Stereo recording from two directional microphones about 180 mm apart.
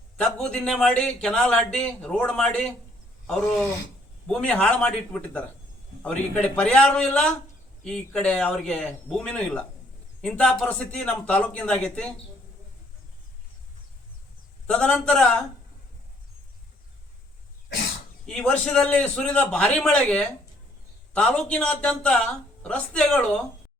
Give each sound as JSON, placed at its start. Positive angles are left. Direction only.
{"t": 0.2, "sound": "speech", "side_deg": 5}
{"t": 14.7, "sound": "speech", "side_deg": 5}
{"t": 18.3, "sound": "speech", "side_deg": 5}